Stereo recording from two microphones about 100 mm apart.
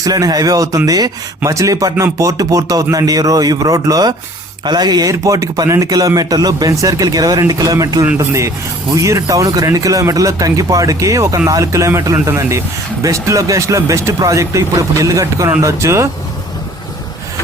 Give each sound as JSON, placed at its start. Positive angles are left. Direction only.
{"t": 0.0, "sound": "speech", "side_deg": -40}
{"t": 12.1, "sound": "speech", "side_deg": -20}
{"t": 12.4, "sound": "speech", "side_deg": -30}